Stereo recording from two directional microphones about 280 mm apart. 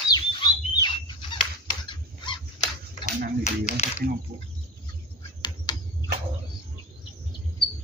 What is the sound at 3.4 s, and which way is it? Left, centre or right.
Speech, left.